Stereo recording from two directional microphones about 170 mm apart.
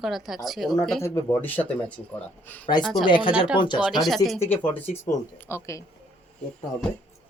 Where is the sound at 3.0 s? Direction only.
30° left (ahead or behind).